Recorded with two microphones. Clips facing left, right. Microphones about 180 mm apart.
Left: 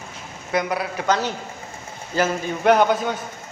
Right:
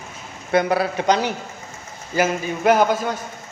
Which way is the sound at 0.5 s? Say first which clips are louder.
Right 5 dB; 30° right (ahead or behind).